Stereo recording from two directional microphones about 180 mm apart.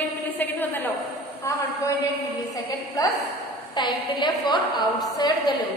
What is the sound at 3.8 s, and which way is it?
A woman's voice, 25° left (ahead or behind).